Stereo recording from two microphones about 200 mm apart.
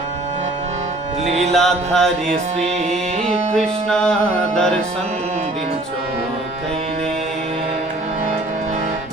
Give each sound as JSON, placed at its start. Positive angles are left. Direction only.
{"t": 1.2, "sound": "music", "side_deg": -30}
{"t": 1.5, "sound": "music", "side_deg": 0}